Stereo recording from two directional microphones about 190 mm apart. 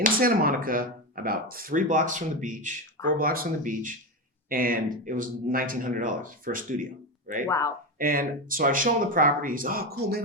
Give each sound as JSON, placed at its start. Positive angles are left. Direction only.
{"t": 0.0, "sound": "speech", "side_deg": -50}
{"t": 7.4, "sound": "speech", "side_deg": 15}
{"t": 7.9, "sound": "speech", "side_deg": -50}